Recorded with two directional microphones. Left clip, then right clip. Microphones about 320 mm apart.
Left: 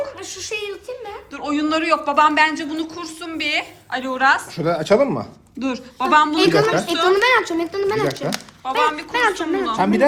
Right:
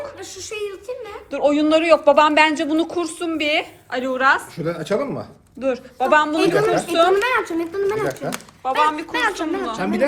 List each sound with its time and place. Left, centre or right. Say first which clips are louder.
0.2 s speech: left 3 dB; centre
1.3 s speech: right 5 dB; centre
4.5 s speech: left 6 dB; centre
5.5 s speech: right 3 dB; centre
9.8 s speech: left 4 dB; left